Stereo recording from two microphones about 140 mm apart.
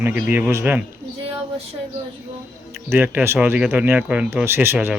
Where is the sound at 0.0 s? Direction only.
15° right (ahead or behind).